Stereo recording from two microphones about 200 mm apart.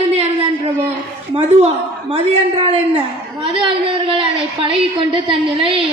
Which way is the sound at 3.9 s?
25° right (ahead or behind).